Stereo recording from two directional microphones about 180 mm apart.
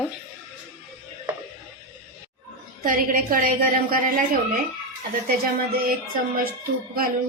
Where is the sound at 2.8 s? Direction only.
50° right (ahead or behind).